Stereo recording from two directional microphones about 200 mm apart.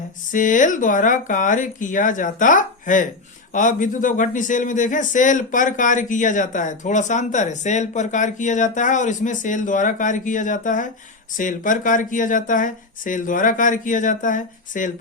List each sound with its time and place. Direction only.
0.3 s speech: 40° left (ahead or behind)